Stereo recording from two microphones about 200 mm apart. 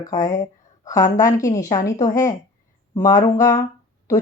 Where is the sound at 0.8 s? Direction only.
15° left (ahead or behind).